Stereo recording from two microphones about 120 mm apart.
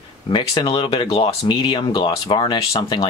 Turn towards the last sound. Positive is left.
turn(degrees=40)  # may be behind; listen again after turning